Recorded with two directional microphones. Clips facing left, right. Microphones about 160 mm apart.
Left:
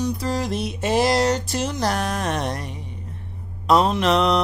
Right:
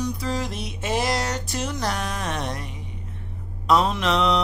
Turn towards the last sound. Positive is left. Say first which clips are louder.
# left 3 dB
turn(degrees=45)  # may be behind; listen again after turning